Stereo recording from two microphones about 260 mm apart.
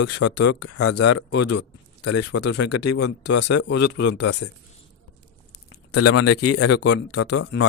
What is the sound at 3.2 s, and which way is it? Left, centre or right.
Speech, left.